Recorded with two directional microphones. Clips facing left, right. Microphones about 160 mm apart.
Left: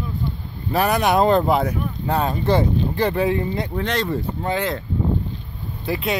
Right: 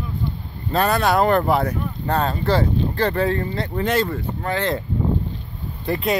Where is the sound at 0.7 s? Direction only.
15° left (ahead or behind).